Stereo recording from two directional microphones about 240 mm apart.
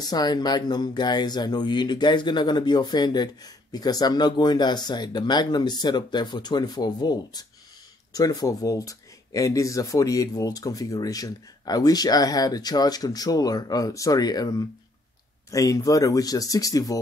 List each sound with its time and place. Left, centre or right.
0.0 s speech: centre